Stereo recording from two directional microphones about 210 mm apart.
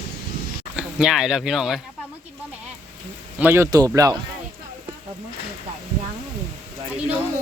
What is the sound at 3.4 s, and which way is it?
Speech, 10° right (ahead or behind).